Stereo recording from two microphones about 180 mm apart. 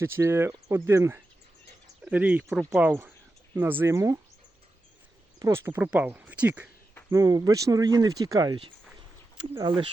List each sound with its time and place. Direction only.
0.0 s speech: 15° right (ahead or behind)
2.4 s speech: centre (ahead or behind); by 4.2 s 15° right (ahead or behind)
5.4 s speech: 15° right (ahead or behind)
7.1 s speech: 20° right (ahead or behind)